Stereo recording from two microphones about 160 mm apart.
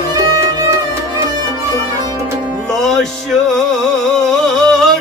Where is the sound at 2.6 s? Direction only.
5° left (ahead or behind).